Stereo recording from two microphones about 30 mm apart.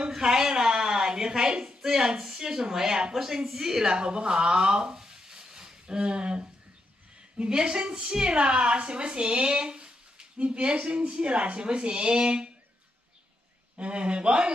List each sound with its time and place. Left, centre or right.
0.1 s a sound: centre
1.6 s speech: centre
5.9 s a woman's voice: right
13.7 s speech: right